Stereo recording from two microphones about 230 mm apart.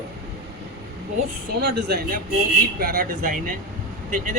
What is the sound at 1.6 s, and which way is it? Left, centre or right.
Speech, right.